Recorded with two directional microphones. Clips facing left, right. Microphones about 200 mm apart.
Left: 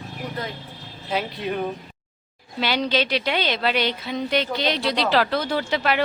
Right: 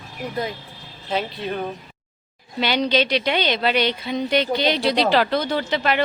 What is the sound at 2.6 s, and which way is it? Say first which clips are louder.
A woman's voice: right 3 dB; 5° left (ahead or behind).